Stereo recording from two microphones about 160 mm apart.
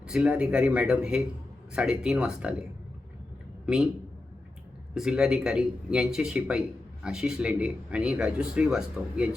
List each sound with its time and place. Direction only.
0.1 s speech: 5° right (ahead or behind)
4.9 s speech: 5° right (ahead or behind)